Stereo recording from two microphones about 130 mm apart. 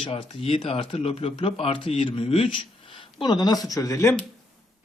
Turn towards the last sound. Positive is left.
turn(degrees=25)  # may be behind; listen again after turning